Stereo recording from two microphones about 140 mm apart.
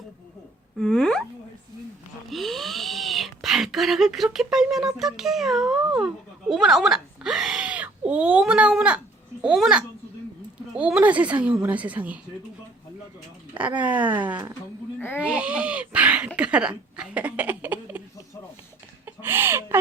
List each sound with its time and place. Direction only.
0.8 s a sound: 5° left (ahead or behind)
2.3 s speech: centre (ahead or behind)
13.5 s speech: 10° right (ahead or behind)
14.9 s a sound: 15° left (ahead or behind)
15.2 s speech: 10° right (ahead or behind)
19.0 s chicken: 15° right (ahead or behind)